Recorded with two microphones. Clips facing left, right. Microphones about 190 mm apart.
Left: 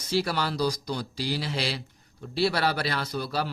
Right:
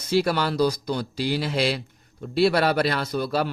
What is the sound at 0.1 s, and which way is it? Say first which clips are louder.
A man's voice: right 5 dB; 55° right (ahead or behind).